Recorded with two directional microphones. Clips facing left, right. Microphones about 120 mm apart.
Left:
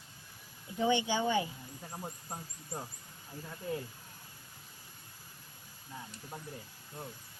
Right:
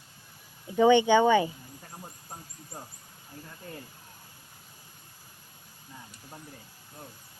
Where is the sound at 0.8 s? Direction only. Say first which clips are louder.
Right 11 dB; 65° right (ahead or behind).